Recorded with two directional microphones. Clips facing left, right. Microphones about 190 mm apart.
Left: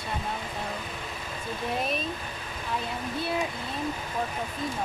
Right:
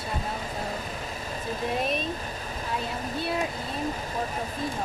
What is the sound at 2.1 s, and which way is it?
Speech, 40° right (ahead or behind).